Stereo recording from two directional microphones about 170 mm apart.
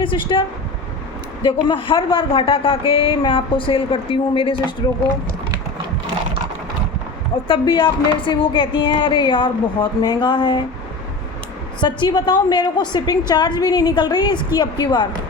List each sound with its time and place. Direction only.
0.0 s speech: 30° left (ahead or behind)
1.5 s speech: 30° left (ahead or behind)
7.4 s speech: 30° left (ahead or behind)
11.8 s speech: 25° left (ahead or behind)